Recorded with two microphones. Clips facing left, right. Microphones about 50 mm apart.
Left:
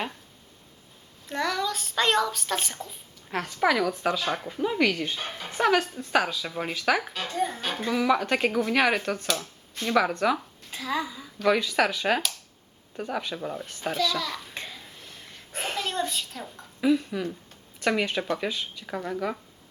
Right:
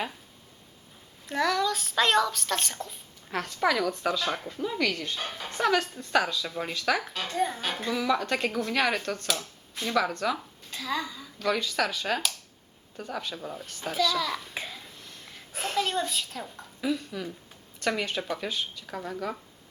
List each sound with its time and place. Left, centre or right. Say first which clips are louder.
1.3 s speech: right 2 dB; centre
4.6 s speech: left 4 dB; left
5.1 s speech: left 2 dB; centre
8.0 s a woman's voice: left 4 dB; centre
13.9 s a sound: right 2 dB; centre
16.8 s speech: left 6 dB; centre